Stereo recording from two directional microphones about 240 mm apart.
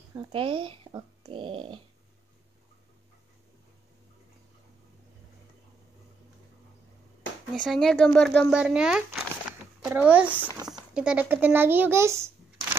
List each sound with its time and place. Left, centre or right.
0.1 s speech: centre
7.6 s speech: centre